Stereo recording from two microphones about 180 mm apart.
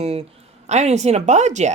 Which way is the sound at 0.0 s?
35° right (ahead or behind).